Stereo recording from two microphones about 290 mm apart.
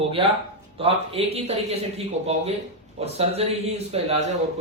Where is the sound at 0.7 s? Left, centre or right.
Centre.